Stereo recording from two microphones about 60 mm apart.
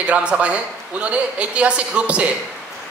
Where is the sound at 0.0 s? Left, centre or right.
Centre.